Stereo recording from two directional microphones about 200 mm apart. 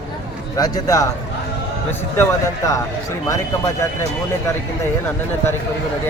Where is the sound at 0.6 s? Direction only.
20° left (ahead or behind).